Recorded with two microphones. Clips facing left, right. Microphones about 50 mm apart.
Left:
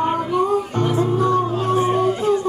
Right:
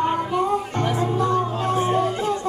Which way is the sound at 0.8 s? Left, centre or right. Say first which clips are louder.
Left 4 dB; right.